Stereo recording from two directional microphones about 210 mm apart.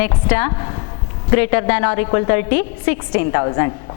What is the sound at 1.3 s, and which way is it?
A woman's voice, 10° left (ahead or behind).